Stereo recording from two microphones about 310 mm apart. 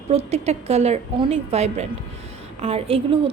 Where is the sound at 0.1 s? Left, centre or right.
Centre.